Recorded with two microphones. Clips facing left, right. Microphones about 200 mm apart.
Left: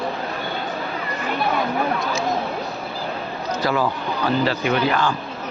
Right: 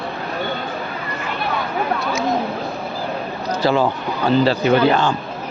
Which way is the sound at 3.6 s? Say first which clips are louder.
Right 4 dB; 30° right (ahead or behind).